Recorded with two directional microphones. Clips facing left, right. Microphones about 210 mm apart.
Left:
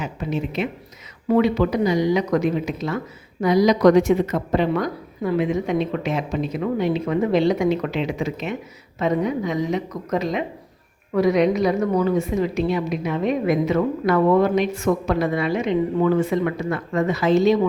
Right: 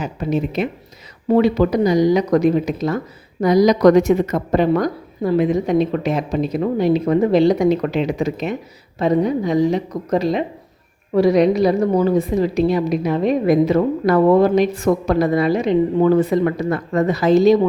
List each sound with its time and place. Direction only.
0.0 s a woman's voice: 40° right (ahead or behind)